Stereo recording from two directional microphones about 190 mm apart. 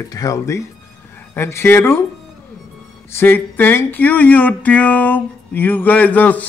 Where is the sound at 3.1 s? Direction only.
10° left (ahead or behind).